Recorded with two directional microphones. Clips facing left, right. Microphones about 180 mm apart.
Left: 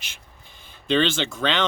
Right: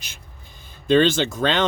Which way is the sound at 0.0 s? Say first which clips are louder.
Right 2 dB; 40° right (ahead or behind).